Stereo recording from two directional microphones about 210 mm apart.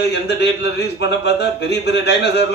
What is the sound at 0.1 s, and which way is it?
A man's voice, 55° left (ahead or behind).